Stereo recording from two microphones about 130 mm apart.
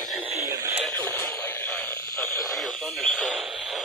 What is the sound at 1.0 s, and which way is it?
Radio, 20° left (ahead or behind).